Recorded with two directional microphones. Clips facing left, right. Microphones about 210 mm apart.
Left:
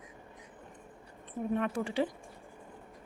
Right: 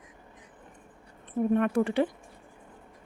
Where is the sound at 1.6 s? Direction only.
55° right (ahead or behind).